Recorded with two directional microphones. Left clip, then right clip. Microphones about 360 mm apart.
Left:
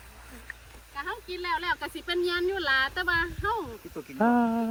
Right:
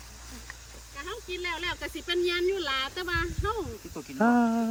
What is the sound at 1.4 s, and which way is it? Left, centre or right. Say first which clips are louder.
Speech: left 4 dB; centre.